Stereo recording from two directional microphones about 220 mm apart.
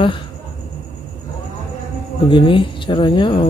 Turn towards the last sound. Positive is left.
turn(degrees=20)  # may be behind; listen again after turning